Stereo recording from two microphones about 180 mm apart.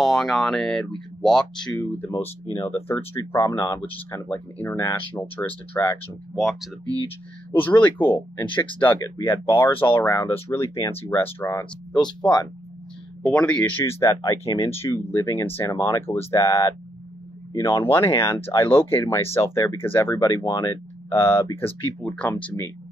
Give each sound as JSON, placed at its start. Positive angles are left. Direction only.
{"t": 0.0, "sound": "speech", "side_deg": 0}
{"t": 6.3, "sound": "speech", "side_deg": 0}
{"t": 11.9, "sound": "speech", "side_deg": 25}
{"t": 13.2, "sound": "speech", "side_deg": 5}